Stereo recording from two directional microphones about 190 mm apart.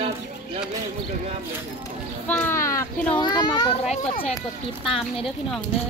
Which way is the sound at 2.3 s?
10° left (ahead or behind).